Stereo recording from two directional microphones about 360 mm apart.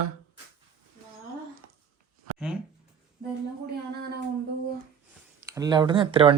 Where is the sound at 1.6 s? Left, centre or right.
Right.